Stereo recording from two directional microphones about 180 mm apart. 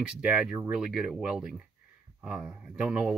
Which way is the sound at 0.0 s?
5° right (ahead or behind).